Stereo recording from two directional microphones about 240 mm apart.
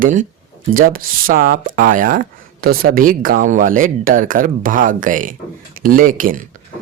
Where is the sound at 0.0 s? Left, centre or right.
Right.